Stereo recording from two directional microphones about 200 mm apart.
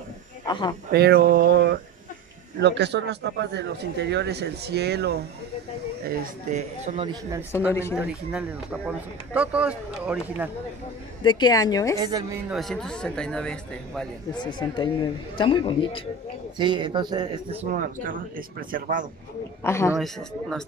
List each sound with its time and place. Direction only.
0.5 s a man's voice: 25° left (ahead or behind)
0.9 s speech: 55° right (ahead or behind)
6.0 s a man's voice: 40° right (ahead or behind)
7.5 s a woman's voice: 15° left (ahead or behind)
7.9 s speech: 5° right (ahead or behind)
11.2 s a man's voice: 20° left (ahead or behind)
12.0 s speech: 20° right (ahead or behind)
12.4 s speech: centre (ahead or behind)
14.4 s a man's voice: 20° left (ahead or behind)
16.5 s speech: 25° right (ahead or behind)
18.7 s speech: 40° right (ahead or behind)
19.6 s a woman's voice: 15° left (ahead or behind)
20.0 s speech: centre (ahead or behind)